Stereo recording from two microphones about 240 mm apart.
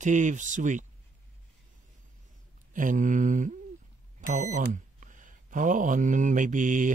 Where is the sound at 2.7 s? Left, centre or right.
Right.